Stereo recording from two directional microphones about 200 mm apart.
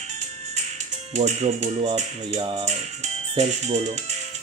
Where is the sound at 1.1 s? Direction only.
35° right (ahead or behind).